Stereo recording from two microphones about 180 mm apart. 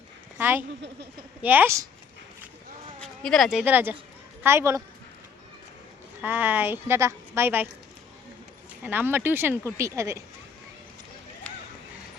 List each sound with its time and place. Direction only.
0.3 s speech: 10° right (ahead or behind)
3.0 s speech: centre (ahead or behind); by 4.8 s 15° right (ahead or behind)
6.2 s speech: 10° right (ahead or behind)
8.8 s speech: 10° right (ahead or behind)